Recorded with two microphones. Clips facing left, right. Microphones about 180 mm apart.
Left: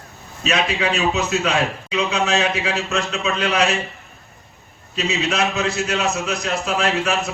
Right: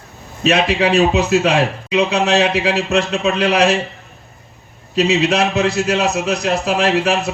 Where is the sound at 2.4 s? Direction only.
65° right (ahead or behind).